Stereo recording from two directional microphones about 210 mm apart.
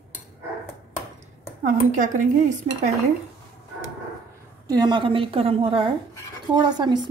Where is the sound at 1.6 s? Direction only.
35° right (ahead or behind).